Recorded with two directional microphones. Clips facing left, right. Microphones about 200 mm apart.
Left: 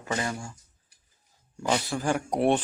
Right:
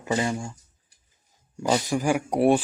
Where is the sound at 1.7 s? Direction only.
15° right (ahead or behind).